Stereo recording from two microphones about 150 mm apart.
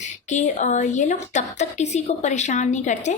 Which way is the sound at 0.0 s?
50° left (ahead or behind).